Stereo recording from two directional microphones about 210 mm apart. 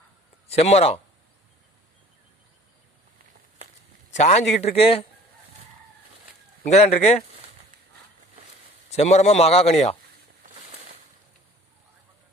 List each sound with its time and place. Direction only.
0.5 s speech: 30° left (ahead or behind)
4.1 s a man's voice: 35° left (ahead or behind)
6.6 s a man's voice: 30° left (ahead or behind)
8.9 s a man's voice: 30° left (ahead or behind)
10.4 s a sound: 35° right (ahead or behind)